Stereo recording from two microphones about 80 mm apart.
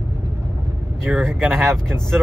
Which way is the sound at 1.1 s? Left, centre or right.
Centre.